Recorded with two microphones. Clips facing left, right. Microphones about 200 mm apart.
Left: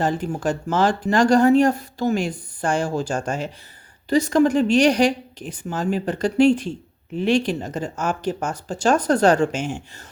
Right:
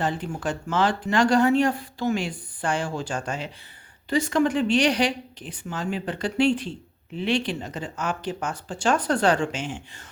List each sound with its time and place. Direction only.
0.0 s a woman's voice: 40° left (ahead or behind)